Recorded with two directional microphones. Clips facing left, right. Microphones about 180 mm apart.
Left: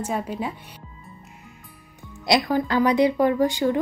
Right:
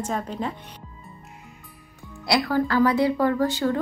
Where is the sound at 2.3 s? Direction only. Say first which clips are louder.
Left 1 dB; 20° left (ahead or behind).